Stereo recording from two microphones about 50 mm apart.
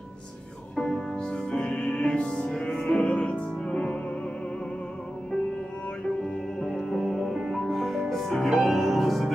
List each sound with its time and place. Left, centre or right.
1.1 s music: centre
6.0 s music: centre